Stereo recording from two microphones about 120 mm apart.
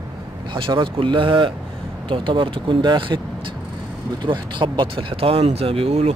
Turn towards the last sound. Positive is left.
turn(degrees=-55)  # may be behind; listen again after turning